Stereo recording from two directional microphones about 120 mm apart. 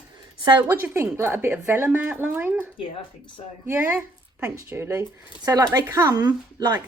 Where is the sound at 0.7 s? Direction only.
25° right (ahead or behind).